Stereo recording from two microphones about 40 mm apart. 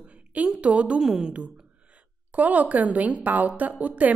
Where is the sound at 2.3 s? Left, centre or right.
Right.